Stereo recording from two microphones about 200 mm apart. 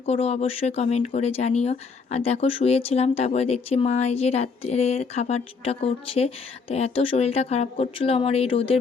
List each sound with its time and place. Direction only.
0.0 s speech: 30° left (ahead or behind)